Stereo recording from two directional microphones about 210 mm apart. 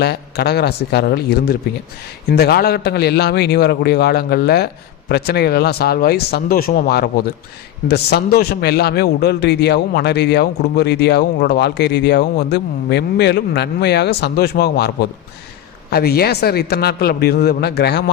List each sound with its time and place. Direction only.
0.0 s a man's voice: 50° left (ahead or behind)